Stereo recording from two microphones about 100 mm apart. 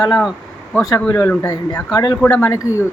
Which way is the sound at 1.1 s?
35° left (ahead or behind).